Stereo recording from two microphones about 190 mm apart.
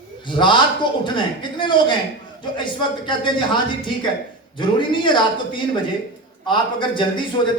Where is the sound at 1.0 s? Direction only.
25° left (ahead or behind).